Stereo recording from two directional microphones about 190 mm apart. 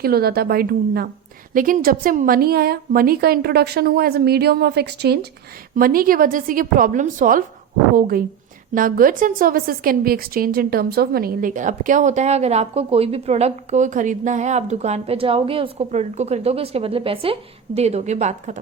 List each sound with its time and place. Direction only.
0.0 s a woman's voice: 55° right (ahead or behind)